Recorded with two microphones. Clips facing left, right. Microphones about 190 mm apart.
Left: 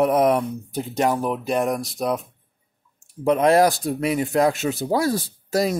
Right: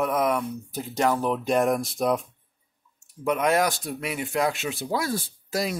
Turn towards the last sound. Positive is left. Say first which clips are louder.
# left 6 dB
turn(degrees=40)  # may be behind; listen again after turning